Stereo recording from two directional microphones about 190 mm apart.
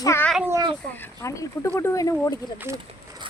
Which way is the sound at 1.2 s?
15° left (ahead or behind).